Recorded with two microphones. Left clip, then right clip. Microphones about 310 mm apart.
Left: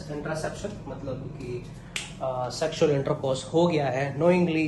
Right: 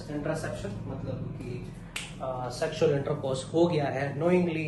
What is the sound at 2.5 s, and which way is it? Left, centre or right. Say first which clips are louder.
A man's voice: left 1 dB; left.